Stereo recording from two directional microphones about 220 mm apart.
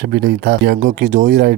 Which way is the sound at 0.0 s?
45° right (ahead or behind).